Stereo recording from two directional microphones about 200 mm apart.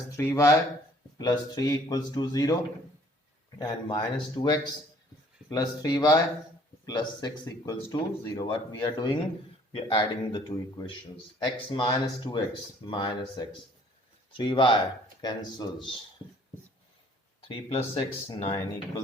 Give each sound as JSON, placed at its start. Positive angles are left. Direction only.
{"t": 0.2, "sound": "speech", "side_deg": 15}
{"t": 3.6, "sound": "speech", "side_deg": 20}
{"t": 17.5, "sound": "speech", "side_deg": 30}